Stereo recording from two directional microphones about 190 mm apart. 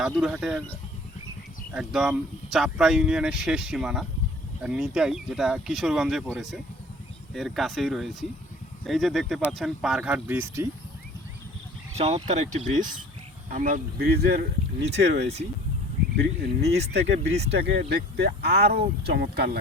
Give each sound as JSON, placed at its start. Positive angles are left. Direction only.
{"t": 0.0, "sound": "speech", "side_deg": -5}
{"t": 1.7, "sound": "speech", "side_deg": -5}
{"t": 11.9, "sound": "speech", "side_deg": -35}